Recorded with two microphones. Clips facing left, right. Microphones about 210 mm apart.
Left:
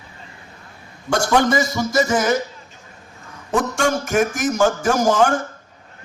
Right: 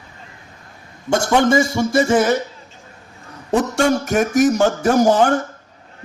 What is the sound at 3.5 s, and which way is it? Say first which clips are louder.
Speech: right 3 dB; 35° right (ahead or behind).